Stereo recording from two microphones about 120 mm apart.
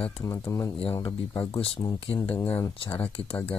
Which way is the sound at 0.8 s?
45° left (ahead or behind).